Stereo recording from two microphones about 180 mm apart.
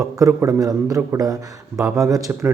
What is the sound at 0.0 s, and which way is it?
Speech, 15° right (ahead or behind).